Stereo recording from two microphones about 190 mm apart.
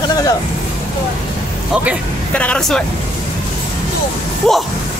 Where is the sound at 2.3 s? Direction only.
5° left (ahead or behind).